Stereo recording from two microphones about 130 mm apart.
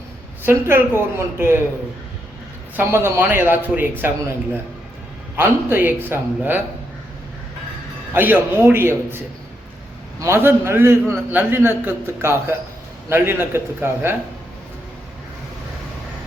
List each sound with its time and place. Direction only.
0.4 s a man's voice: 15° right (ahead or behind)
2.7 s a man's voice: 15° right (ahead or behind)
5.4 s a man's voice: 15° right (ahead or behind)
8.1 s a man's voice: 15° right (ahead or behind)